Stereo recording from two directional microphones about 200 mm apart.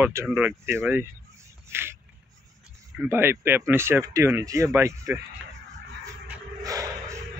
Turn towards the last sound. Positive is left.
turn(degrees=-15)  # may be behind; listen again after turning